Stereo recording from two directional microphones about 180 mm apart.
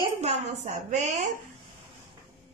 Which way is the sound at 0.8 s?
40° right (ahead or behind).